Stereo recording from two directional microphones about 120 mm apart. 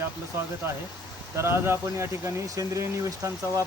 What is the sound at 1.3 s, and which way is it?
Speech, 20° right (ahead or behind).